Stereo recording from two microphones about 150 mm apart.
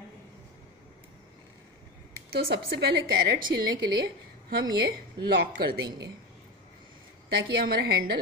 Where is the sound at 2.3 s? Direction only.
90° right.